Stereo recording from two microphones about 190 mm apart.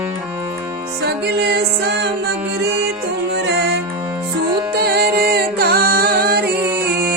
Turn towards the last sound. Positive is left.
turn(degrees=-55)  # may be behind; listen again after turning